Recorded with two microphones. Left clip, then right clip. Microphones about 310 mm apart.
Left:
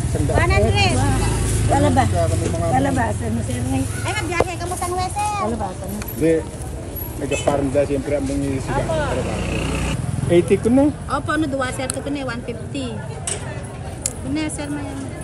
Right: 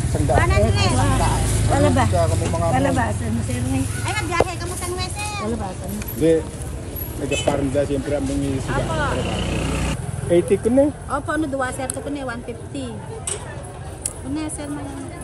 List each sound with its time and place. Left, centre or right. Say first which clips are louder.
0.0 s speech: right 1 dB; centre
10.3 s speech: left 1 dB; left
11.1 s speech: left 2 dB; centre
14.3 s speech: left 3 dB; centre